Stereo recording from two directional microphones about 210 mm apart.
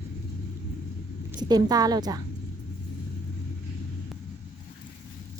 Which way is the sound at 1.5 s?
20° right (ahead or behind).